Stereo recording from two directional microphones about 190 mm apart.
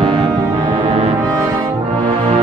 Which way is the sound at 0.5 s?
30° right (ahead or behind).